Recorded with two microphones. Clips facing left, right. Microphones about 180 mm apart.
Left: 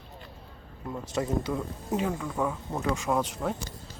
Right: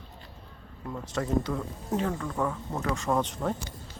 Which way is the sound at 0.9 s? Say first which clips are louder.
Right 1 dB; 10° left (ahead or behind).